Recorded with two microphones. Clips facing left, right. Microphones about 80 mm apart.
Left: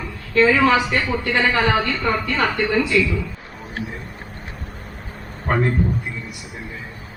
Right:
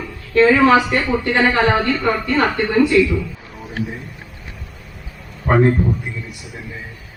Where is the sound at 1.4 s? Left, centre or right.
Right.